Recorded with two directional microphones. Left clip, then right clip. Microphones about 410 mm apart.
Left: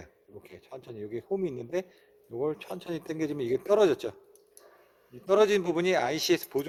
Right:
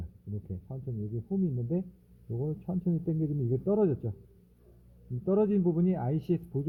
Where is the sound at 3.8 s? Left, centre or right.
Left.